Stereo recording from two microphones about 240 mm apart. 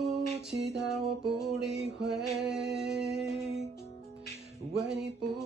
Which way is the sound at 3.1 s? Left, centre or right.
Centre.